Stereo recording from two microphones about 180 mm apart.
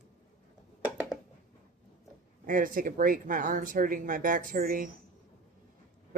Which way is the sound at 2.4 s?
50° right (ahead or behind).